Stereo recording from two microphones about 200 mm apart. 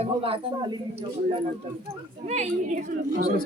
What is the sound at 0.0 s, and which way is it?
Speech, 30° right (ahead or behind).